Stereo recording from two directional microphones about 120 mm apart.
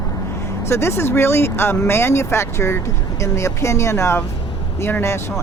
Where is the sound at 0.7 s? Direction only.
20° left (ahead or behind).